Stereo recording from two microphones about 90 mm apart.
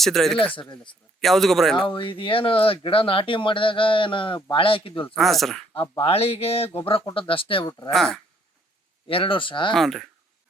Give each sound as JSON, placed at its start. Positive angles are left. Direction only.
{"t": 0.0, "sound": "speech", "side_deg": 5}
{"t": 0.3, "sound": "speech", "side_deg": 75}
{"t": 1.2, "sound": "speech", "side_deg": 0}
{"t": 1.8, "sound": "speech", "side_deg": 70}
{"t": 4.5, "sound": "speech", "side_deg": 85}
{"t": 5.1, "sound": "speech", "side_deg": 0}
{"t": 6.0, "sound": "speech", "side_deg": 90}
{"t": 7.9, "sound": "speech", "side_deg": 5}
{"t": 9.0, "sound": "speech", "side_deg": 85}
{"t": 9.7, "sound": "speech", "side_deg": 0}